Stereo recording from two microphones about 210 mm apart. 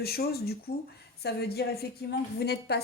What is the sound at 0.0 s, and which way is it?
Speech, 50° left (ahead or behind).